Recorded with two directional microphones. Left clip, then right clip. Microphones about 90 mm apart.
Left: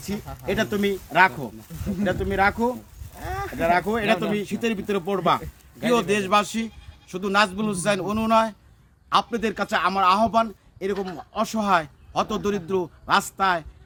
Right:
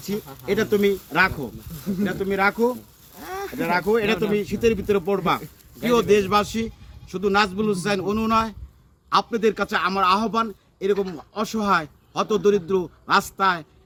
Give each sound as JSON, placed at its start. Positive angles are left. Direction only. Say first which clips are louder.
{"t": 0.0, "sound": "a man's voice", "louder": "right 1 dB", "side_deg": 30}
{"t": 10.9, "sound": "speech", "louder": "right 4 dB", "side_deg": 20}
{"t": 11.3, "sound": "speech", "louder": "even", "side_deg": 35}